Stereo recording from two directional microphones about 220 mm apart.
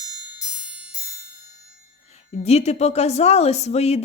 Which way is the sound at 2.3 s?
30° left (ahead or behind).